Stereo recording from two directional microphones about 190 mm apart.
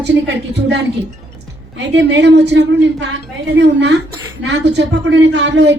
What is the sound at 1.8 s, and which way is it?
A woman's voice, 65° right (ahead or behind).